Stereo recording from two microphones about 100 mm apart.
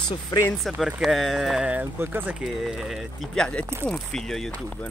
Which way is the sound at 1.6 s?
20° right (ahead or behind).